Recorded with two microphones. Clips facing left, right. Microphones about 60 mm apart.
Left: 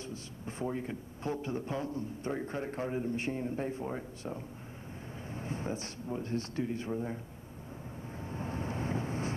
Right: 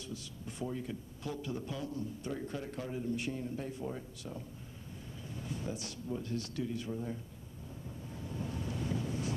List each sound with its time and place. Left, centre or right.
0.0 s speech: left
8.2 s vehicle: left